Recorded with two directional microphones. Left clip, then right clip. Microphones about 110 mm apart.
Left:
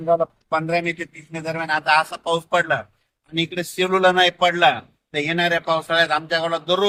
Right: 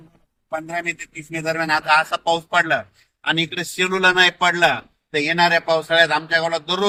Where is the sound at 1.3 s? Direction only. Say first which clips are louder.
Right 3 dB; 30° left (ahead or behind).